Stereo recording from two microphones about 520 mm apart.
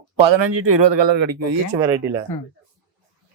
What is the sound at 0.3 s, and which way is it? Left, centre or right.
Speech, right.